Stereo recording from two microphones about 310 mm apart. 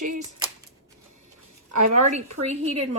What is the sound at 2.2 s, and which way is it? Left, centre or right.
Speech, right.